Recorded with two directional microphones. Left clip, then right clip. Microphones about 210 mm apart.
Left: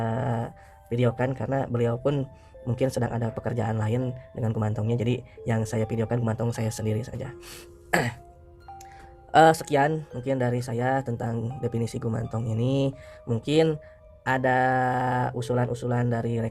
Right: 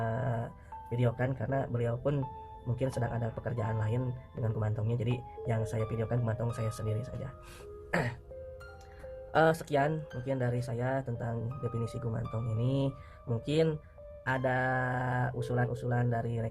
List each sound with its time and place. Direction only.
0.0 s music: 35° left (ahead or behind)
2.7 s speech: 35° left (ahead or behind)
7.9 s throat clearing: 45° left (ahead or behind)
9.3 s speech: 40° left (ahead or behind)